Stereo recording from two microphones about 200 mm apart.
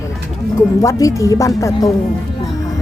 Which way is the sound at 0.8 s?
15° left (ahead or behind).